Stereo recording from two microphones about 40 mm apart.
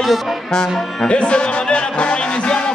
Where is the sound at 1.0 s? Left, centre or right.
Left.